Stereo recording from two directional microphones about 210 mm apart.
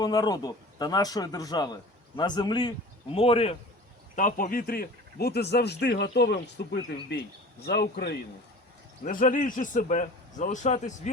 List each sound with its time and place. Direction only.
0.0 s a man's voice: 20° left (ahead or behind); by 8.1 s 50° left (ahead or behind)
9.0 s a man's voice: 40° left (ahead or behind)